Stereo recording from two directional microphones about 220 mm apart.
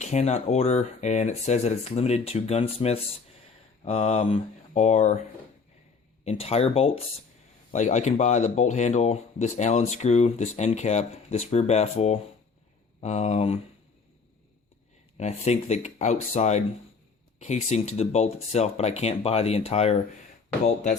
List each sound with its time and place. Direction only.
0.0 s speech: 30° left (ahead or behind)
6.2 s speech: 25° left (ahead or behind)
15.2 s speech: 30° left (ahead or behind)